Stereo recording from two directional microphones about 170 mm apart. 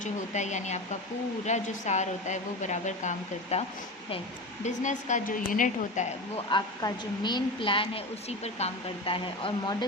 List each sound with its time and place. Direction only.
0.0 s a woman's voice: 45° left (ahead or behind)
4.6 s a woman's voice: 45° left (ahead or behind)
6.5 s a woman's voice: 25° left (ahead or behind)